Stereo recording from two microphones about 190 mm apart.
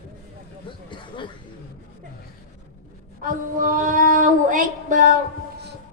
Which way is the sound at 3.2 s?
45° right (ahead or behind).